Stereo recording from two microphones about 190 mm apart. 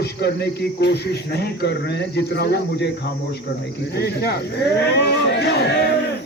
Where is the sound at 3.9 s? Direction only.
60° left (ahead or behind).